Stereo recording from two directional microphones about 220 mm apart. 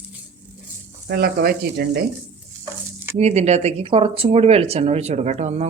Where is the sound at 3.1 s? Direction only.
30° right (ahead or behind).